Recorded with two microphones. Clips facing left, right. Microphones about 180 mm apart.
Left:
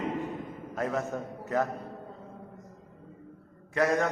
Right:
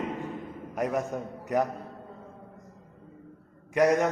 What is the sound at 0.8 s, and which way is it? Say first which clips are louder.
Speech: right 2 dB; 15° right (ahead or behind).